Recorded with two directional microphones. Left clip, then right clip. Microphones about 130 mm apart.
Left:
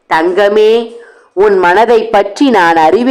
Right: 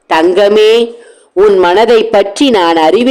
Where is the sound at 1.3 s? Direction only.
15° right (ahead or behind).